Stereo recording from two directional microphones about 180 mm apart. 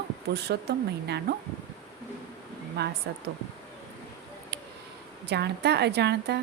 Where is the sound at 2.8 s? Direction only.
65° right (ahead or behind).